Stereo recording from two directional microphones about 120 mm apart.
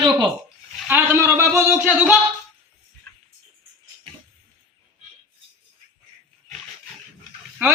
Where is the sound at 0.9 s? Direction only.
20° right (ahead or behind).